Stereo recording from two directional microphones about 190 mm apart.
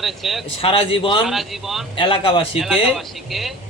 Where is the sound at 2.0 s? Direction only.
30° left (ahead or behind).